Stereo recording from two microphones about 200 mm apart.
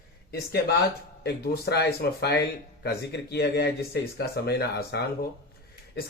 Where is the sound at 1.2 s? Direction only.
55° left (ahead or behind).